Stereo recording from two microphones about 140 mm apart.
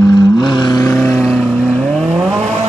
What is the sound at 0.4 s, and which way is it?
Vehicle, 30° left (ahead or behind).